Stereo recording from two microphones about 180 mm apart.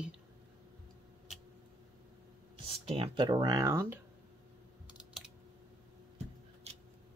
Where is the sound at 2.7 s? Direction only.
30° right (ahead or behind); by 4.0 s 15° right (ahead or behind).